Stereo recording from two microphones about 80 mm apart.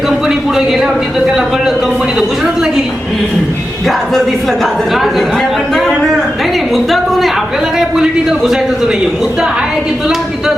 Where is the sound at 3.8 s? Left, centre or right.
Centre.